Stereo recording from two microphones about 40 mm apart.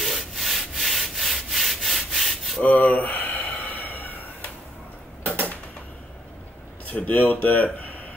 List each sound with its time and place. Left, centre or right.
0.0 s rub: centre
2.6 s speech: left
3.6 s chicken: left
6.9 s speech: left